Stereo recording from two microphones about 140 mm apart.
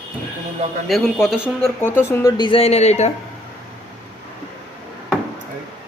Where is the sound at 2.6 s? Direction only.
50° left (ahead or behind).